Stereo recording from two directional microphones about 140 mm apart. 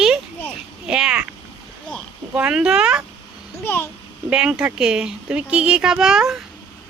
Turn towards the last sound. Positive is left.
turn(degrees=-5)  # may be behind; listen again after turning